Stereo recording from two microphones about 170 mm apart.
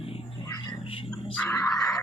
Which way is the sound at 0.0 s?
35° left (ahead or behind).